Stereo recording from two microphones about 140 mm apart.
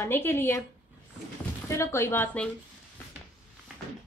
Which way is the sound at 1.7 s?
20° left (ahead or behind).